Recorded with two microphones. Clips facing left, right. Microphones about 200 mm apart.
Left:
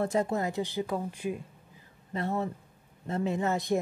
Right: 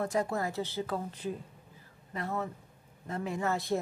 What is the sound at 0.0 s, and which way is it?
Speech, 25° left (ahead or behind).